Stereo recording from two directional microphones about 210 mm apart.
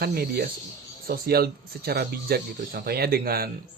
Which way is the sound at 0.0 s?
45° right (ahead or behind).